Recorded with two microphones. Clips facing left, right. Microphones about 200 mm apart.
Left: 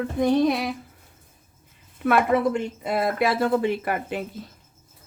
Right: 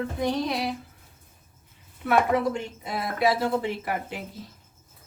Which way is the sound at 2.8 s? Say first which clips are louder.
Left 2 dB; 55° left (ahead or behind).